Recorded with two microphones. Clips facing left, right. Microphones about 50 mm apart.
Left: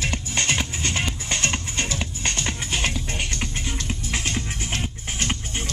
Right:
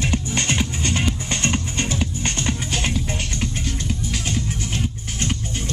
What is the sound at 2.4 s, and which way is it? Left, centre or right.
Music, centre.